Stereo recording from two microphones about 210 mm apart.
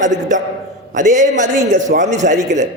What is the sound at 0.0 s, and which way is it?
A man's voice, 35° right (ahead or behind).